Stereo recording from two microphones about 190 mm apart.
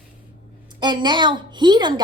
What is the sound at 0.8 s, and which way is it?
A woman's voice, 25° right (ahead or behind).